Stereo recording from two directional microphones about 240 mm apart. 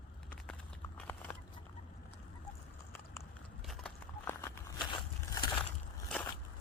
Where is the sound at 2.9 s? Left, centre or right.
Centre.